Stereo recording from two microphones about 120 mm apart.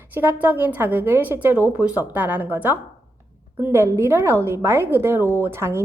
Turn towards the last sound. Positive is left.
turn(degrees=-20)  # may be behind; listen again after turning